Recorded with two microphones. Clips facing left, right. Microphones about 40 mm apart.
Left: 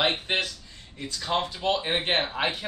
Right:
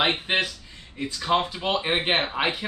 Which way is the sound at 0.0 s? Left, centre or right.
Centre.